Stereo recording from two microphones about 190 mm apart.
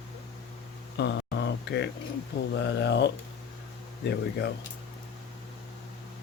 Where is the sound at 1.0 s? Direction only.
65° left (ahead or behind).